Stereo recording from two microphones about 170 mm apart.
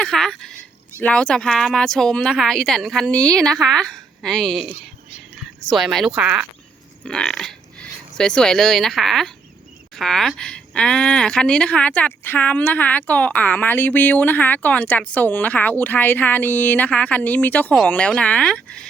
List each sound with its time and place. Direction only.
0.0 s speech: 5° left (ahead or behind)
3.2 s a woman's voice: 20° right (ahead or behind)
3.6 s a woman's voice: 5° left (ahead or behind)
7.0 s a sound: 5° left (ahead or behind)
8.2 s speech: 5° left (ahead or behind)